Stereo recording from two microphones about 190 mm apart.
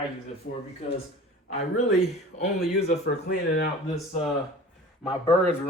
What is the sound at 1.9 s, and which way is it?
Speech, 35° left (ahead or behind).